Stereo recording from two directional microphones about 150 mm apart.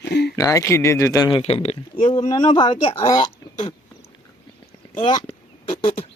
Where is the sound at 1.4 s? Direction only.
40° left (ahead or behind).